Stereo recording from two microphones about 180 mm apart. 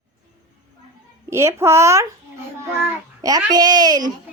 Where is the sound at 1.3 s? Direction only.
15° right (ahead or behind).